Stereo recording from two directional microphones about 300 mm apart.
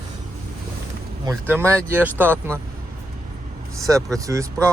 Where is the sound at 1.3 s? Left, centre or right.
Centre.